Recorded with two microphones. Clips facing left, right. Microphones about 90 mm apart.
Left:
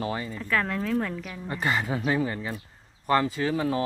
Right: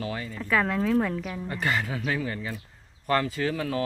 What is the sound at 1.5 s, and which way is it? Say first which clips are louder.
Speech: left 2 dB; 20° left (ahead or behind).